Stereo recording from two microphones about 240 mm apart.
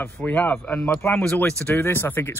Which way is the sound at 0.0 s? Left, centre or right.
Centre.